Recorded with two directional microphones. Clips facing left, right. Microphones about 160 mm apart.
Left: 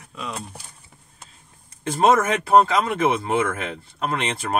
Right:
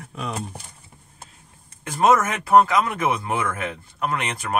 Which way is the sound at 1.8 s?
30° left (ahead or behind).